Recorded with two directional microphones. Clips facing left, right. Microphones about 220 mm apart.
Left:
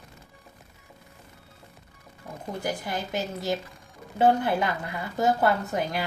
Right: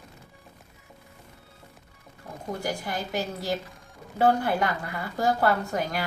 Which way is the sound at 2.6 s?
20° left (ahead or behind).